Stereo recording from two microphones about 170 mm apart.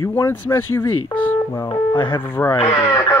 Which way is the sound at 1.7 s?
30° left (ahead or behind).